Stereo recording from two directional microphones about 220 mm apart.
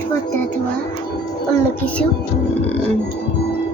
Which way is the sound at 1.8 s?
5° left (ahead or behind).